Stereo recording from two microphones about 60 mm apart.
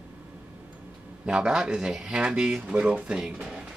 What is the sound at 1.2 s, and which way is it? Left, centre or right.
Speech, centre.